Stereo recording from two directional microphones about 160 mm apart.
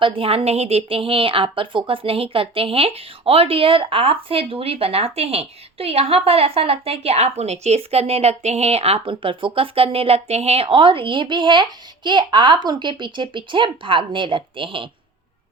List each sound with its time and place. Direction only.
0.0 s a woman's voice: 35° right (ahead or behind)